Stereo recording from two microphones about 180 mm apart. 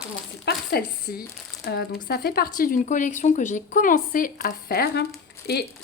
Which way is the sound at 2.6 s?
50° left (ahead or behind).